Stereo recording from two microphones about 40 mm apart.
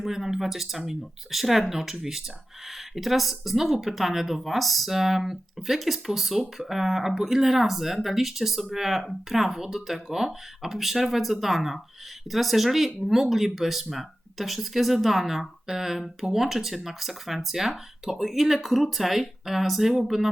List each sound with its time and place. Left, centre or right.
0.0 s speech: centre